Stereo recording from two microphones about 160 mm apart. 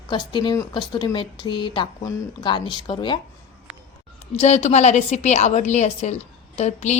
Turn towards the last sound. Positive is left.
turn(degrees=45)  # may be behind; listen again after turning